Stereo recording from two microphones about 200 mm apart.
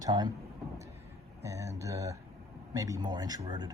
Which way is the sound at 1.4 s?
15° right (ahead or behind).